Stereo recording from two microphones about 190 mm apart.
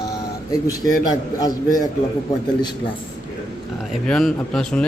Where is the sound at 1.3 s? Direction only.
20° left (ahead or behind).